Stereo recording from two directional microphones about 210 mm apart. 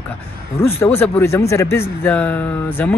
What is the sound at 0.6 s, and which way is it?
Speech, 10° left (ahead or behind).